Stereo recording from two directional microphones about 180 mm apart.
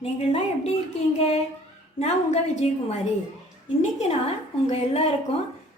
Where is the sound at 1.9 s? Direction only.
40° left (ahead or behind).